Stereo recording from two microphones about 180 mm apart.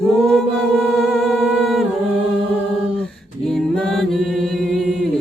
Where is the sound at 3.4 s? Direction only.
Centre (ahead or behind).